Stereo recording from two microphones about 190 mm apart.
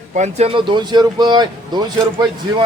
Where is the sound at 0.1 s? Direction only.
35° right (ahead or behind).